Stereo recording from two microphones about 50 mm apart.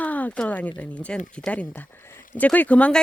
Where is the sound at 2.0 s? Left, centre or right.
Left.